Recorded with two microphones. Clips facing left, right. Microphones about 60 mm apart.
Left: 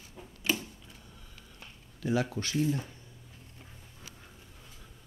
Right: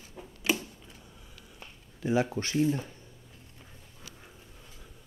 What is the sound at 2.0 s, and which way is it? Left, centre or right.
Speech, right.